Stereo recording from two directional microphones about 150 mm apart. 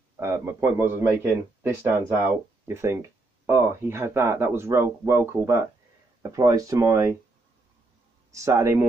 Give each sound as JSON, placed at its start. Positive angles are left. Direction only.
{"t": 0.2, "sound": "speech", "side_deg": -20}
{"t": 8.3, "sound": "speech", "side_deg": -20}